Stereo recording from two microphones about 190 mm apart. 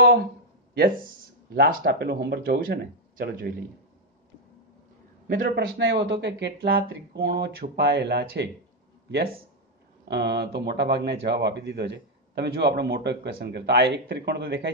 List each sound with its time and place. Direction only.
0.7 s a man's voice: 50° right (ahead or behind)
5.3 s a man's voice: 50° right (ahead or behind)
5.8 s speech: 65° right (ahead or behind)
10.0 s speech: 65° right (ahead or behind)